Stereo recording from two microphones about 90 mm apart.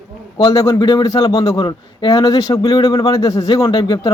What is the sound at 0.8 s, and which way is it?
Speech, 50° left (ahead or behind).